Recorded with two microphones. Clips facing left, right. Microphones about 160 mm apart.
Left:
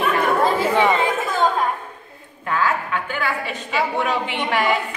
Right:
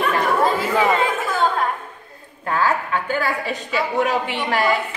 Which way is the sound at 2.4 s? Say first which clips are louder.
Right 1 dB; 35° right (ahead or behind).